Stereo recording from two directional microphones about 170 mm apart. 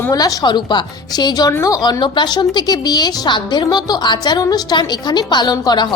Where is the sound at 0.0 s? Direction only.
20° left (ahead or behind).